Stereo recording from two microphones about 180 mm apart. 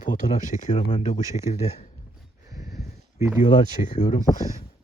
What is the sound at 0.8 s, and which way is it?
Speech, 30° left (ahead or behind).